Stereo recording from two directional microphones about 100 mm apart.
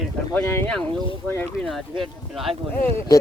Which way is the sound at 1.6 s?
Centre (ahead or behind).